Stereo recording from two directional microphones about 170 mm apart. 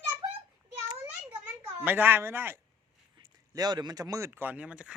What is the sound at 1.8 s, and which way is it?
Speech, 10° right (ahead or behind).